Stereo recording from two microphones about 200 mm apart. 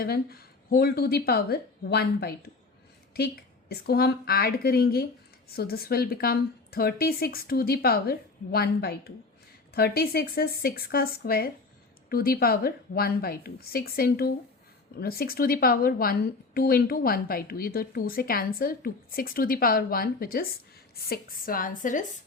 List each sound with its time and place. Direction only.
0.0 s a woman's voice: 50° left (ahead or behind)